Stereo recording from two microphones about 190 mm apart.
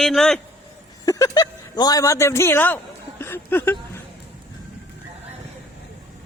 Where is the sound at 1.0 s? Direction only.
20° left (ahead or behind).